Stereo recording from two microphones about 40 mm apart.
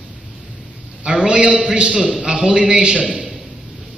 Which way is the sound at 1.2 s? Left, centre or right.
Right.